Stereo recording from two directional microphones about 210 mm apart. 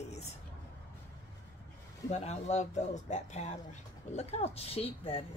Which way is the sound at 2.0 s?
30° left (ahead or behind).